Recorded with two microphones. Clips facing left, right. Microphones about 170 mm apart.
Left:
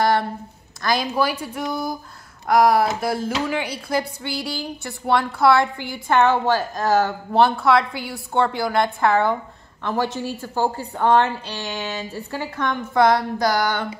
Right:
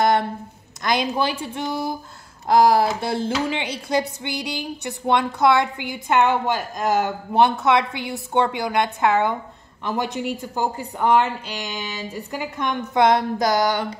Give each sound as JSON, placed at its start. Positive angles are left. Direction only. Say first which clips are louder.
{"t": 0.8, "sound": "a woman's voice", "louder": "left 1 dB", "side_deg": -20}